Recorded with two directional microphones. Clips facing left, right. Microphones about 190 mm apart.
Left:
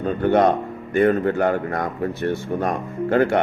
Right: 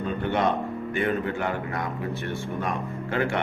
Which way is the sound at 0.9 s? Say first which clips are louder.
Left 10 dB; 45° left (ahead or behind).